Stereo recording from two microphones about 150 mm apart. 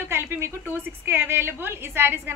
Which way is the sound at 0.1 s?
15° right (ahead or behind).